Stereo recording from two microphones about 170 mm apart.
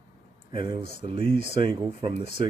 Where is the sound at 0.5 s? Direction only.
30° right (ahead or behind).